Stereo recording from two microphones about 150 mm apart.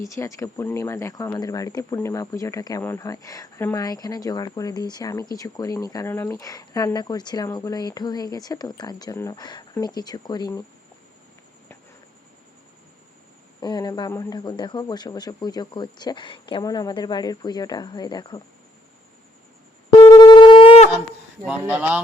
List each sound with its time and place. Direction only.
0.0 s speech: 20° left (ahead or behind)
13.6 s speech: 30° left (ahead or behind)
20.0 s wind instrument: 30° left (ahead or behind)
21.4 s speech: 10° right (ahead or behind)